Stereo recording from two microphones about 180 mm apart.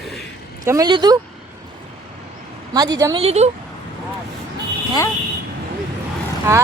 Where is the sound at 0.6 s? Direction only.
20° right (ahead or behind).